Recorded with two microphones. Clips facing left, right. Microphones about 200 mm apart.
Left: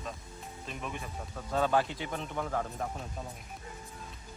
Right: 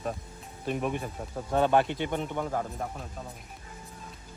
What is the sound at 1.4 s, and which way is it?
A man's voice, 25° right (ahead or behind).